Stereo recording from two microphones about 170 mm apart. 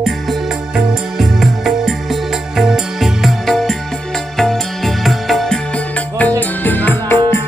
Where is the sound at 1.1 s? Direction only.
Centre (ahead or behind).